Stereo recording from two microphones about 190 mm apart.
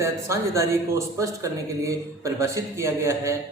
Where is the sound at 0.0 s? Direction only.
15° right (ahead or behind).